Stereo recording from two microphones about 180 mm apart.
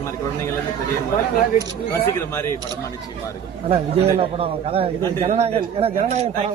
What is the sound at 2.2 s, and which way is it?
Speech, 15° left (ahead or behind).